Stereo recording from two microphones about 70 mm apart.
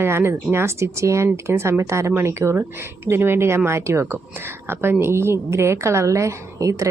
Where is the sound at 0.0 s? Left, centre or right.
Right.